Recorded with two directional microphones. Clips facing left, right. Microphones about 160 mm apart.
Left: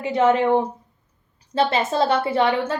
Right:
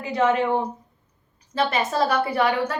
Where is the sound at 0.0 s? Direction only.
25° left (ahead or behind).